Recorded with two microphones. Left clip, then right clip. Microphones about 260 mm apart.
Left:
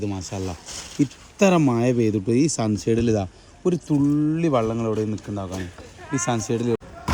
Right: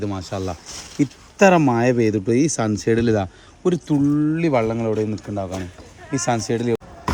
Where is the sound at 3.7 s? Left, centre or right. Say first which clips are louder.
Right 2 dB; right.